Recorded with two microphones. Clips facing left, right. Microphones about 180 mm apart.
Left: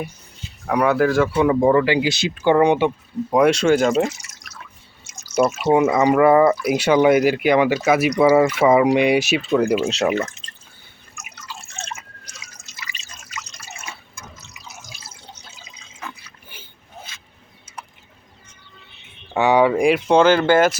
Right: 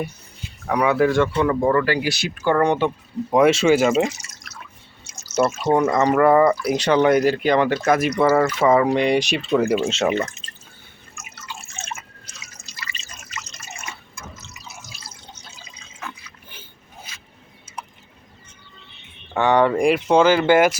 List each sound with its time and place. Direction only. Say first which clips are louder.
0.7 s speech: left 1 dB; centre (ahead or behind)
3.2 s speech: even; centre (ahead or behind)
5.1 s speech: left 2 dB; 10° left (ahead or behind)
13.1 s drip: even; 5° right (ahead or behind)
19.3 s speech: left 1 dB; 10° left (ahead or behind); by 20.7 s 15° right (ahead or behind)